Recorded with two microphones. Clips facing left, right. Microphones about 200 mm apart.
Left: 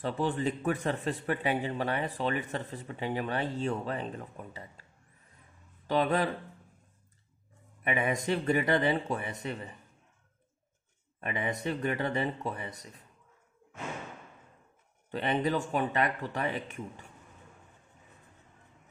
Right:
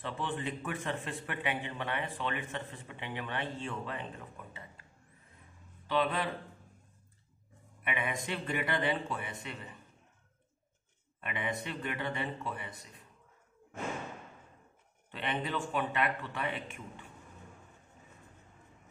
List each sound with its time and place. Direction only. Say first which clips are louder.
0.0 s speech: left 7 dB; 40° left (ahead or behind)
5.9 s speech: left 4 dB; 40° left (ahead or behind)
7.8 s speech: left 6 dB; 40° left (ahead or behind)
11.2 s speech: left 5 dB; 40° left (ahead or behind)
15.0 s speech: left 7 dB; 40° left (ahead or behind)